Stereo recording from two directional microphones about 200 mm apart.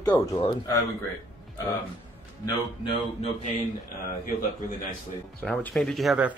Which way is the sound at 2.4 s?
25° left (ahead or behind).